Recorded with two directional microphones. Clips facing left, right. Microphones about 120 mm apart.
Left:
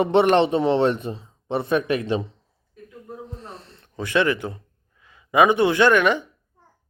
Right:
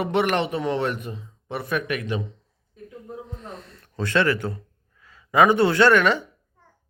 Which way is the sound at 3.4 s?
30° left (ahead or behind).